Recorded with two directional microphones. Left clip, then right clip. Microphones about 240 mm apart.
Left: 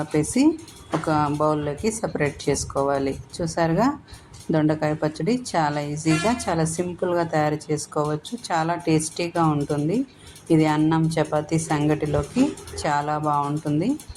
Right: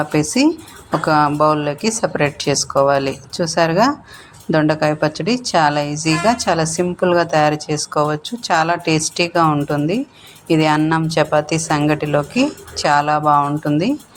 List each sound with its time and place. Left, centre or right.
0.0 s speech: centre